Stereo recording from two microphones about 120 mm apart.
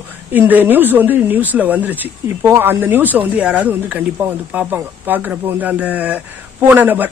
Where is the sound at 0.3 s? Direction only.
15° right (ahead or behind).